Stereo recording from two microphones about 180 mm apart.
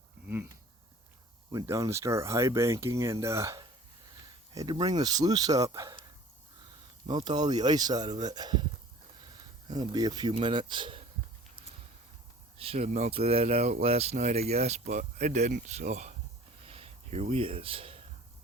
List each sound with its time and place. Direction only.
0.3 s speech: 10° right (ahead or behind)
7.1 s speech: 25° right (ahead or behind)
9.6 s speech: 20° right (ahead or behind)
12.5 s speech: 35° right (ahead or behind)
16.6 s a sound: 35° right (ahead or behind)